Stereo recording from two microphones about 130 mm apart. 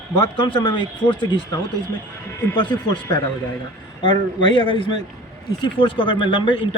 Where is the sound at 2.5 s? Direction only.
35° left (ahead or behind).